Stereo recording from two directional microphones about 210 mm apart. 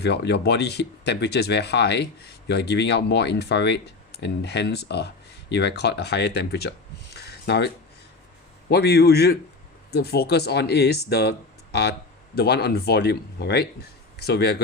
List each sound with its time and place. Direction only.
0.0 s speech: 50° left (ahead or behind)
8.7 s speech: 50° left (ahead or behind)